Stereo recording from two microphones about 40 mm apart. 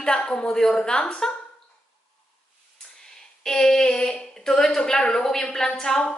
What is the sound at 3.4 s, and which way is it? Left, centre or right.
A woman's voice, centre.